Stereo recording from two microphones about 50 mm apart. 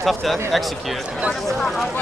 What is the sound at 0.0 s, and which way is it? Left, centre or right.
Speech, centre.